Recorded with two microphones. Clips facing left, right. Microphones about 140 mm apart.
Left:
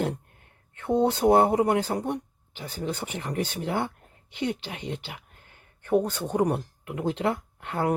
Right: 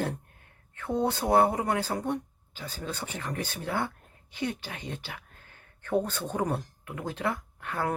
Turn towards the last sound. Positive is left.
turn(degrees=25)  # may be behind; listen again after turning